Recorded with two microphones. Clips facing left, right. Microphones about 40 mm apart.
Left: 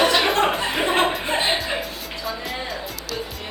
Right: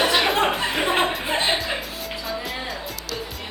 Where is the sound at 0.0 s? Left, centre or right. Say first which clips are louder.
Left 1 dB; centre.